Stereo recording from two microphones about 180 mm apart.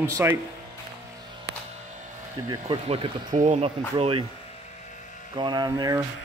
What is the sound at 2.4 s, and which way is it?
Speech, 25° right (ahead or behind).